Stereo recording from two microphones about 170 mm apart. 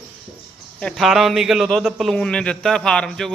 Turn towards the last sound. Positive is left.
turn(degrees=5)  # may be behind; listen again after turning